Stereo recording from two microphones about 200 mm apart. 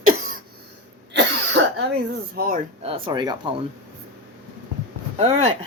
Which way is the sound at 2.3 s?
45° right (ahead or behind).